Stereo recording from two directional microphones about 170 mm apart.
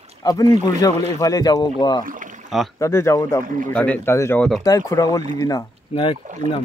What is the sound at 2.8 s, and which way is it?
Speech, 15° left (ahead or behind).